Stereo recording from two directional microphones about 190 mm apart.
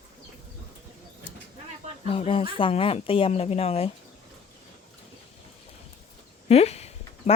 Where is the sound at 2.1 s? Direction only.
30° left (ahead or behind).